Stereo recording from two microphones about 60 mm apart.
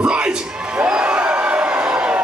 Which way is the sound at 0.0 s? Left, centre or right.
Centre.